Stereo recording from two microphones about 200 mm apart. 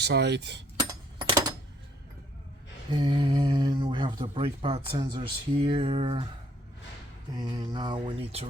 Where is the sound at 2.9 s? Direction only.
25° right (ahead or behind).